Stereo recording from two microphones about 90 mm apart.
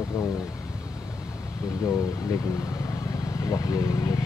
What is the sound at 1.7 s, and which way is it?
Speech, 40° left (ahead or behind).